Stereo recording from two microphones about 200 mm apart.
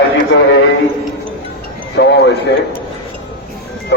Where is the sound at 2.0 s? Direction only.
60° left (ahead or behind).